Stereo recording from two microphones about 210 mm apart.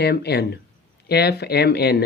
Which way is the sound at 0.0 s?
50° left (ahead or behind).